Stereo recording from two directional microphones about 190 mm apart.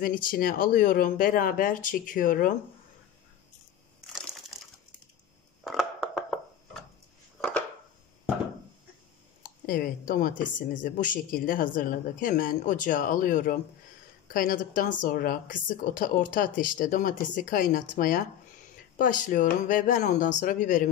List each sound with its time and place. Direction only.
0.0 s speech: 45° left (ahead or behind)
4.1 s a sound: centre (ahead or behind)
9.4 s speech: 50° left (ahead or behind)